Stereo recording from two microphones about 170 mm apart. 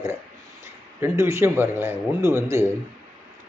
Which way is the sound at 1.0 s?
15° right (ahead or behind).